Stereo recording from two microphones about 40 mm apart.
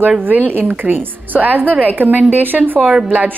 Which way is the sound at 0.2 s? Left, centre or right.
Right.